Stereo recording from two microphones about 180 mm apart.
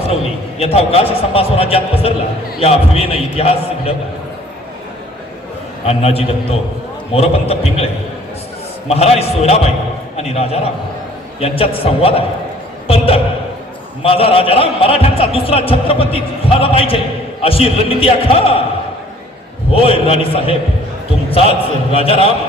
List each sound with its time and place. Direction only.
0.6 s a man's voice: 35° left (ahead or behind)
5.8 s a man's voice: 35° left (ahead or behind)
8.9 s a man's voice: 35° left (ahead or behind)
12.9 s a sound: 35° left (ahead or behind)
14.0 s a man's voice: 30° left (ahead or behind)
19.7 s a man's voice: 30° left (ahead or behind)
21.2 s basketball bounce: 30° left (ahead or behind)
21.9 s a man's voice: 35° left (ahead or behind)